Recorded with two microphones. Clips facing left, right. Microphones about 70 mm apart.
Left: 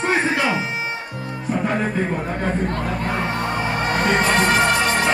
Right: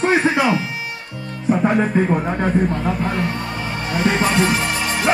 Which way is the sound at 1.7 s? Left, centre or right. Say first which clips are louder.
Right 4 dB; centre.